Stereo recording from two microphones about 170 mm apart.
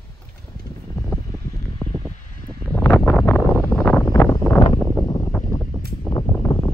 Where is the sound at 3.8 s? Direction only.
15° left (ahead or behind).